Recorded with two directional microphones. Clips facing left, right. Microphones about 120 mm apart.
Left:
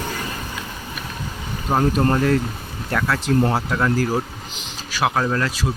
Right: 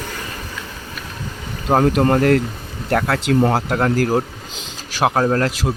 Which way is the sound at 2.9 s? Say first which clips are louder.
Right 3 dB; 60° right (ahead or behind).